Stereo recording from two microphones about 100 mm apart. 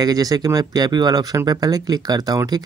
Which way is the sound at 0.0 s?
40° right (ahead or behind).